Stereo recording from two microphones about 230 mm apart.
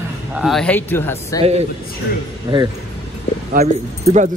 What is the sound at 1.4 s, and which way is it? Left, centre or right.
Speech, right.